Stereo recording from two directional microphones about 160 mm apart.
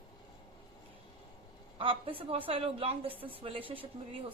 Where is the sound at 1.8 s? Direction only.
35° right (ahead or behind).